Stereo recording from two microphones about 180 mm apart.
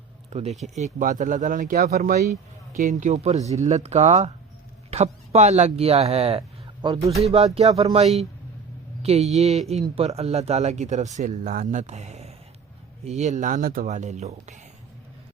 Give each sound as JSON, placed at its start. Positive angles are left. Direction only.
{"t": 0.6, "sound": "speech", "side_deg": -35}
{"t": 7.3, "sound": "speech", "side_deg": -35}